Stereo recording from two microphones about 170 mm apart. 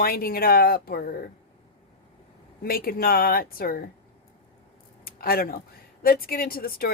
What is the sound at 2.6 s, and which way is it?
Speech, 60° left (ahead or behind).